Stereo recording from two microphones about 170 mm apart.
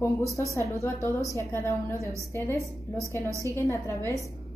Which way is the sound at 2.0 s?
20° right (ahead or behind).